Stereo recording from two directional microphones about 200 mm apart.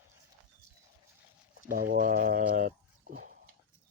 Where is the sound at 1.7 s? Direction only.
45° right (ahead or behind).